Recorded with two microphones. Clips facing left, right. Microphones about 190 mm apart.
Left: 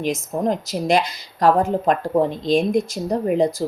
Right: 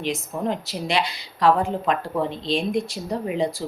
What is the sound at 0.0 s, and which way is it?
Speech, 45° left (ahead or behind).